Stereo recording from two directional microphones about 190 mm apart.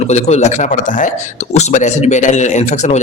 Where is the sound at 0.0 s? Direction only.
35° left (ahead or behind).